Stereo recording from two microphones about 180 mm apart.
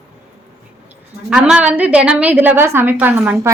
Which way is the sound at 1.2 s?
5° right (ahead or behind).